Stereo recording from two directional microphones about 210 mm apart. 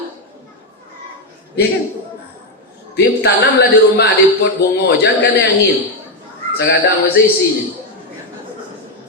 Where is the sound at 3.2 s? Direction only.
50° left (ahead or behind).